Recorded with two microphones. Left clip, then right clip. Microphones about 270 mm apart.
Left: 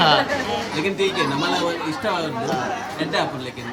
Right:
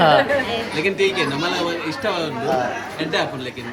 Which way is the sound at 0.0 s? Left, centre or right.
Centre.